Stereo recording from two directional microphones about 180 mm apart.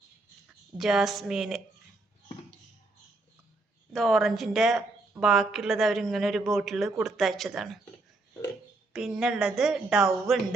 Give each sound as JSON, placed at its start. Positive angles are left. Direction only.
{"t": 0.8, "sound": "a man's voice", "side_deg": 0}
{"t": 3.9, "sound": "a man's voice", "side_deg": 0}
{"t": 8.9, "sound": "a man's voice", "side_deg": -5}